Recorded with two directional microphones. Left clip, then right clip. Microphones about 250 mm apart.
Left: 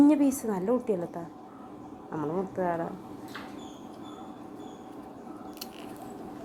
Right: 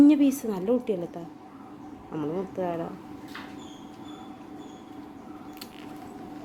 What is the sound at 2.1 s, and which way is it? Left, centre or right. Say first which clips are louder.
Speech: even; centre.